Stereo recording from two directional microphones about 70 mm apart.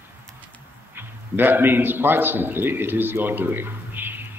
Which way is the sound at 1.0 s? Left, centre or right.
Right.